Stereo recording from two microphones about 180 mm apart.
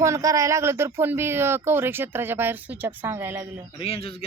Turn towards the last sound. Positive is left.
turn(degrees=30)  # may be behind; listen again after turning